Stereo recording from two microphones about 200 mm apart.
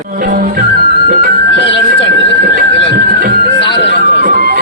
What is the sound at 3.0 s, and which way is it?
Music, 40° right (ahead or behind).